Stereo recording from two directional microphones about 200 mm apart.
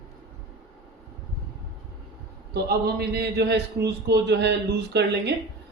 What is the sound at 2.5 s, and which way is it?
A man's voice, 50° right (ahead or behind).